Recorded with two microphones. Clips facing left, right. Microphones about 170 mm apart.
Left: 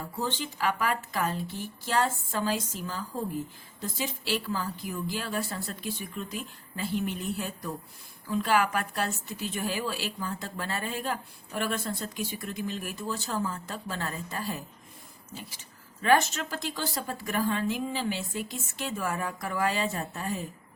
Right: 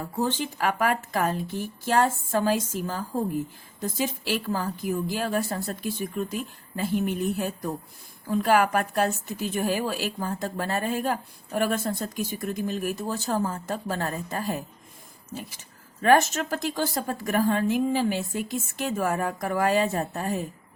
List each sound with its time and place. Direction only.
0.2 s a woman's voice: 50° right (ahead or behind)
16.0 s a woman's voice: 45° right (ahead or behind)